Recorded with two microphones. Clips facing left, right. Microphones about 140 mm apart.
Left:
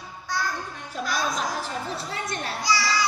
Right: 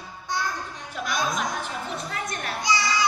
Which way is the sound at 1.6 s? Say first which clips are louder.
Left 1 dB; 30° left (ahead or behind).